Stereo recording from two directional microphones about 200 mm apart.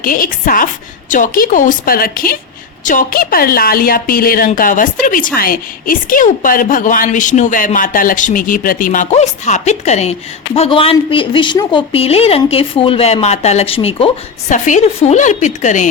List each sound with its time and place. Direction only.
0.0 s a woman's voice: 45° left (ahead or behind)